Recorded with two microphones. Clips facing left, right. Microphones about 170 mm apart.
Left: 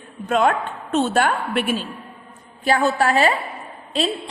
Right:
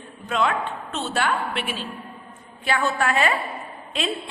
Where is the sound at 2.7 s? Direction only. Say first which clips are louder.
Left 5 dB; 35° left (ahead or behind).